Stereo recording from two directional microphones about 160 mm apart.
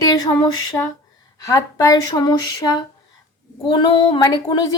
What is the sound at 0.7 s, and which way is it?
A woman's voice, 15° left (ahead or behind).